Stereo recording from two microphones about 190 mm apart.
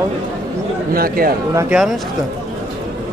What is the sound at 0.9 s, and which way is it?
Speech, 50° right (ahead or behind).